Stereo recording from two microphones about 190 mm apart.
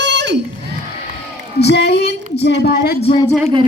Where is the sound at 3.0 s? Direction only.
30° left (ahead or behind).